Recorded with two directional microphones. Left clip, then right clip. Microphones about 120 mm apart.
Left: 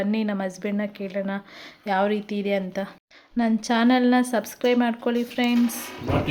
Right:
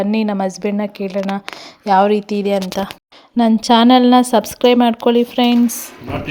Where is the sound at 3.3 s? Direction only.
70° right (ahead or behind).